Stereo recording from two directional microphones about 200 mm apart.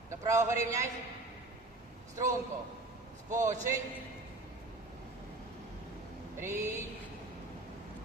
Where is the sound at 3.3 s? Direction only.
15° right (ahead or behind).